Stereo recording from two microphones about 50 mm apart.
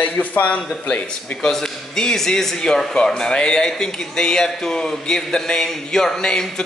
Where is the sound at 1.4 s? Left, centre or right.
Centre.